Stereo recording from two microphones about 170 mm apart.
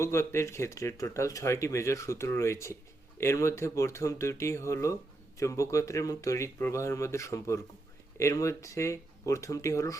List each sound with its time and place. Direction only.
0.0 s speech: 15° left (ahead or behind)